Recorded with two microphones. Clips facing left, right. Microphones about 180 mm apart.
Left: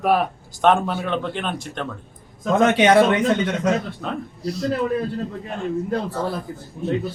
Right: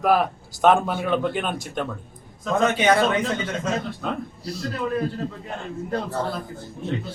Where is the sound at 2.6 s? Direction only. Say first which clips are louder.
Left 5 dB; 80° left.